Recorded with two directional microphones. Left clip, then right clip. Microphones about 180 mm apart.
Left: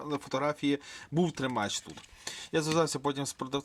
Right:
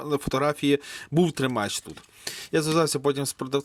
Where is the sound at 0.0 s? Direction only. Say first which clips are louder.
Right 7 dB; 40° right (ahead or behind).